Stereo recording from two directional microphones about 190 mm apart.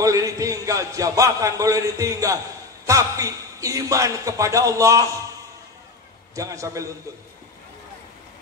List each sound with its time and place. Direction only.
0.0 s a man's voice: 15° right (ahead or behind)
6.3 s a man's voice: 15° right (ahead or behind)